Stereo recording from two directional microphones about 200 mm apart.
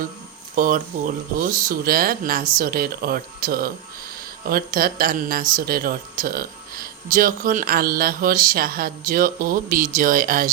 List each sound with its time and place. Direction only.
0.5 s speech: 40° right (ahead or behind)